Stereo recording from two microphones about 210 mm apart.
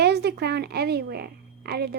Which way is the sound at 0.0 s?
50° right (ahead or behind).